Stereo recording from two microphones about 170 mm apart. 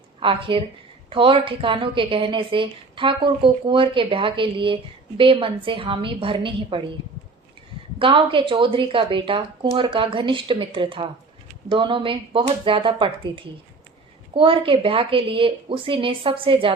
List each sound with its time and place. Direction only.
0.2 s a woman's voice: 30° right (ahead or behind)
7.9 s a woman's voice: 30° right (ahead or behind)